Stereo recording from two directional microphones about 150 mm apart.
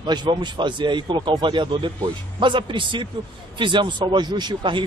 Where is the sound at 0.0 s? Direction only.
30° right (ahead or behind).